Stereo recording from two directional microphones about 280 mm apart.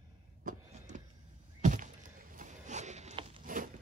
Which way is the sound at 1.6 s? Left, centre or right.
Right.